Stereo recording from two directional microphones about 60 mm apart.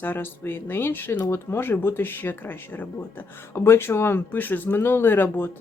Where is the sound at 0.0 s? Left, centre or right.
Left.